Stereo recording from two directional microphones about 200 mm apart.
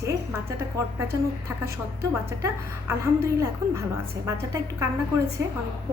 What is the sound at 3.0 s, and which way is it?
A woman's voice, 15° right (ahead or behind).